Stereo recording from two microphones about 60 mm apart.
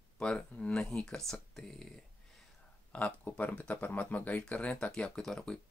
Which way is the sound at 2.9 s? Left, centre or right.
Left.